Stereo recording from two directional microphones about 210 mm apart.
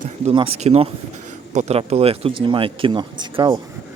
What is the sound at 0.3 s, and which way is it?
Speech, 30° right (ahead or behind).